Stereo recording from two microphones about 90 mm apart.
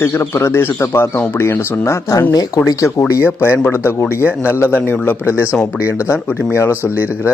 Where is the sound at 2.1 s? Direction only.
45° left (ahead or behind).